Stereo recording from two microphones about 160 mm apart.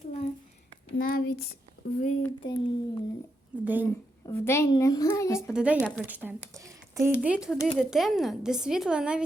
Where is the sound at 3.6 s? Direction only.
10° right (ahead or behind).